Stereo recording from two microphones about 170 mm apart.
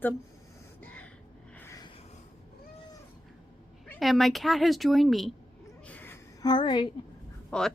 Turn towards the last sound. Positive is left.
turn(degrees=5)  # may be behind; listen again after turning